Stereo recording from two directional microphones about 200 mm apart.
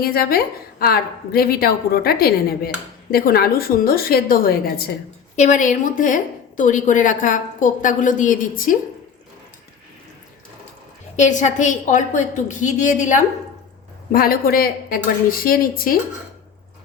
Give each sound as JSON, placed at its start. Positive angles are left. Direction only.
{"t": 0.0, "sound": "a woman's voice", "side_deg": 50}
{"t": 11.2, "sound": "a woman's voice", "side_deg": 35}